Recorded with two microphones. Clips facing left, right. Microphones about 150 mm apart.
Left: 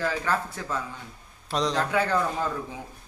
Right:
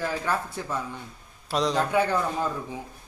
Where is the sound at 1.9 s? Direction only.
15° right (ahead or behind).